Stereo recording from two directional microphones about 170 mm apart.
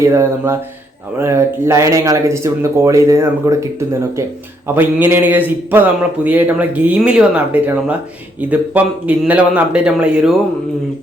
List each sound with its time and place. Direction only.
0.0 s a man's voice: 15° right (ahead or behind)